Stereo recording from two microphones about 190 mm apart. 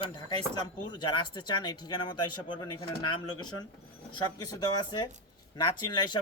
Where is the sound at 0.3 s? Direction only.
20° left (ahead or behind).